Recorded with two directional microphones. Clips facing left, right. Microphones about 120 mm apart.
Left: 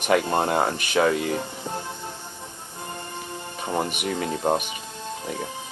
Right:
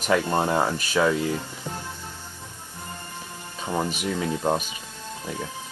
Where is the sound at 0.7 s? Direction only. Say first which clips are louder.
Left 1 dB; 65° left (ahead or behind).